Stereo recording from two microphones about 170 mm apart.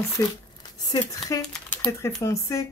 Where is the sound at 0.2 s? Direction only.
15° left (ahead or behind).